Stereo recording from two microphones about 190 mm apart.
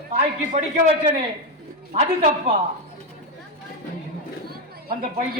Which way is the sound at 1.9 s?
40° right (ahead or behind).